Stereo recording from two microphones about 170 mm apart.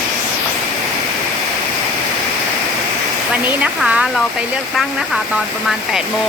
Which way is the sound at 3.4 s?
5° right (ahead or behind).